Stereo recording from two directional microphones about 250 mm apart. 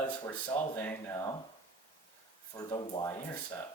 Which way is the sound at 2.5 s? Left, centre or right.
Centre.